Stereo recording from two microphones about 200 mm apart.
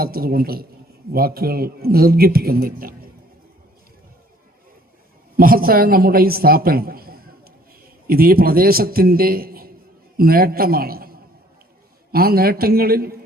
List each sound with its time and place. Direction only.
0.0 s a man's voice: 50° right (ahead or behind)
5.4 s a man's voice: 45° right (ahead or behind)